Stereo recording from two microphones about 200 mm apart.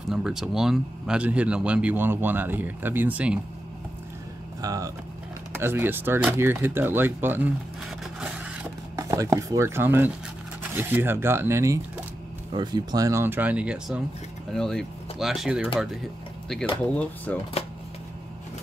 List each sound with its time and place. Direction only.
0.1 s speech: centre (ahead or behind)
4.6 s speech: 20° right (ahead or behind)
8.9 s speech: 15° right (ahead or behind); by 17.4 s 5° left (ahead or behind)